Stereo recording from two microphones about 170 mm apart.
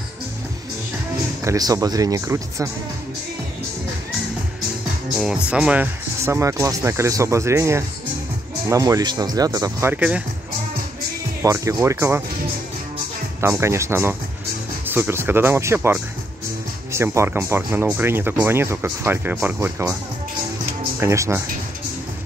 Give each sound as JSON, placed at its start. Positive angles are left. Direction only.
{"t": 1.4, "sound": "speech", "side_deg": -20}
{"t": 5.2, "sound": "speech", "side_deg": -5}
{"t": 11.4, "sound": "speech", "side_deg": -15}
{"t": 13.4, "sound": "speech", "side_deg": -15}
{"t": 21.0, "sound": "speech", "side_deg": -15}